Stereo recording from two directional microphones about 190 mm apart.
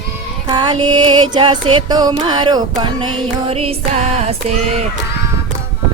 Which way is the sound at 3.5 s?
30° right (ahead or behind).